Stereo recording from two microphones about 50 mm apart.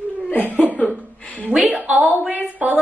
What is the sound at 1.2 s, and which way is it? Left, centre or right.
Speech, left.